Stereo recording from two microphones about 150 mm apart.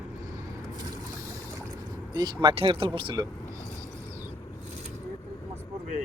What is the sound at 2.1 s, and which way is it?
Speech, 30° right (ahead or behind).